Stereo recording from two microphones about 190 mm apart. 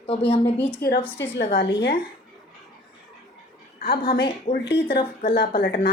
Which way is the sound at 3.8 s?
55° left (ahead or behind).